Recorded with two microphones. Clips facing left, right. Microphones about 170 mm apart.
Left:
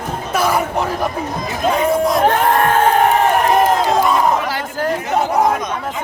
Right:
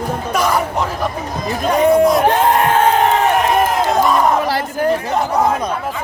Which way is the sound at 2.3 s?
20° right (ahead or behind).